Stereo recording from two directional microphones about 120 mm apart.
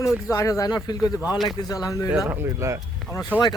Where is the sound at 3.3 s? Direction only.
15° right (ahead or behind).